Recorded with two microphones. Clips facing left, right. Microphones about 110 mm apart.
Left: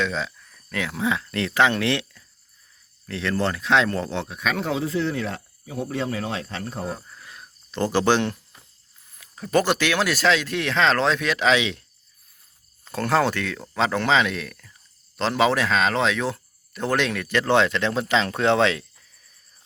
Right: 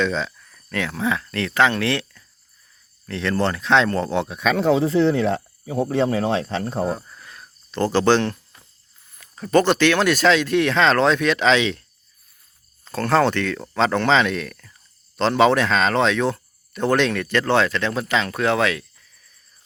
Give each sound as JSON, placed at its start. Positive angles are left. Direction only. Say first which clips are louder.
{"t": 0.0, "sound": "speech", "louder": "right 4 dB", "side_deg": 5}
{"t": 3.1, "sound": "speech", "louder": "right 3 dB", "side_deg": 5}
{"t": 4.3, "sound": "speech", "louder": "right 7 dB", "side_deg": -25}
{"t": 7.2, "sound": "cricket", "louder": "right 1 dB", "side_deg": 10}
{"t": 9.1, "sound": "speech", "louder": "right 4 dB", "side_deg": 5}
{"t": 12.8, "sound": "speech", "louder": "right 3 dB", "side_deg": 15}